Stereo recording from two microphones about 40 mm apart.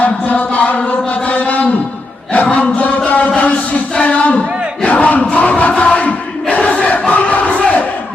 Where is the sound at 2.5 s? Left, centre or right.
Left.